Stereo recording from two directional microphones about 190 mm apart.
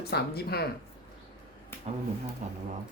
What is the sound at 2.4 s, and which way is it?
Speech, 40° right (ahead or behind).